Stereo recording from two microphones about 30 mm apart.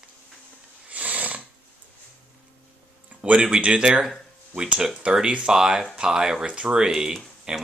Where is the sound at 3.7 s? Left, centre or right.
Right.